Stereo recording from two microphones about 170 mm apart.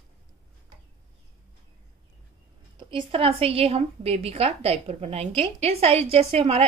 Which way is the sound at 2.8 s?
30° right (ahead or behind).